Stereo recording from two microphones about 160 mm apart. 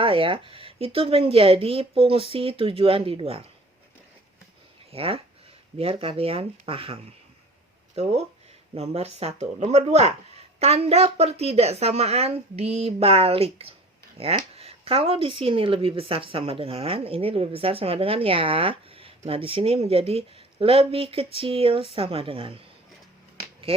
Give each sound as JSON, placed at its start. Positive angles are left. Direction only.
{"t": 0.0, "sound": "speech", "side_deg": -35}
{"t": 4.9, "sound": "speech", "side_deg": -40}
{"t": 23.7, "sound": "speech", "side_deg": -35}